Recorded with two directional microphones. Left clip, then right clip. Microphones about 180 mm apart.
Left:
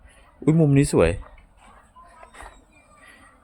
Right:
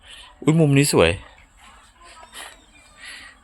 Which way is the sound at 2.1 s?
Centre (ahead or behind).